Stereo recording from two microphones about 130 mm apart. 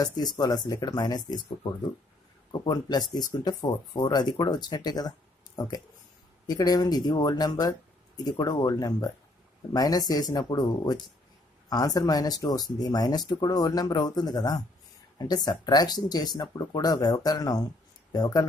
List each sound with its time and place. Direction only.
0.0 s speech: 30° left (ahead or behind)
6.4 s speech: 30° left (ahead or behind)